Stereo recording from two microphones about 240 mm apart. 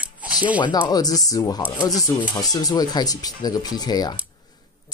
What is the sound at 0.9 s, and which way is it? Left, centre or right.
Speech, centre.